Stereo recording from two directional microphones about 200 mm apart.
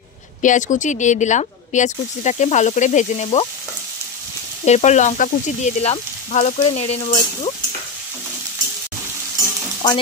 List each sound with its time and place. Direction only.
0.4 s speech: 40° left (ahead or behind)
4.6 s speech: 35° left (ahead or behind)